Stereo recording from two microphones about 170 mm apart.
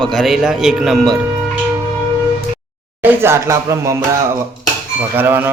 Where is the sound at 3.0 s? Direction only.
15° right (ahead or behind).